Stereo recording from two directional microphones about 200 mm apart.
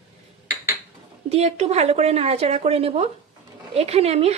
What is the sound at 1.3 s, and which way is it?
Speech, 30° right (ahead or behind).